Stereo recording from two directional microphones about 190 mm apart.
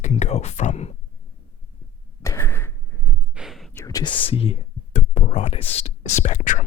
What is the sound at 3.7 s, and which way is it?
Speech, 20° left (ahead or behind).